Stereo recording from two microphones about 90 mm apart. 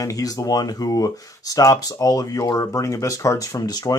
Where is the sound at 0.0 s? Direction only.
40° left (ahead or behind).